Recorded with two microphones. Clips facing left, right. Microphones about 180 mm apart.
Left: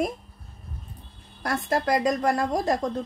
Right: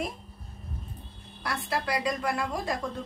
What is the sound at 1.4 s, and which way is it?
A woman's voice, 45° left (ahead or behind).